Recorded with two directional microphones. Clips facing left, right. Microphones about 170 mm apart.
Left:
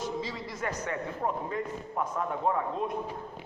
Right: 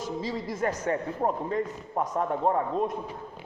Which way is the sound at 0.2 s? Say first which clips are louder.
Right 5 dB; 45° right (ahead or behind).